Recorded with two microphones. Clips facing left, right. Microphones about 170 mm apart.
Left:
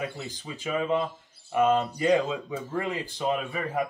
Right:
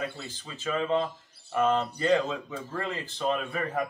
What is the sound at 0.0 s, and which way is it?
Speech, 15° left (ahead or behind).